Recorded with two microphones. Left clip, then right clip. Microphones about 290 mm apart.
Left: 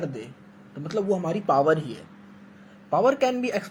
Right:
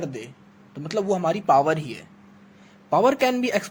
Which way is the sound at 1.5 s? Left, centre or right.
Right.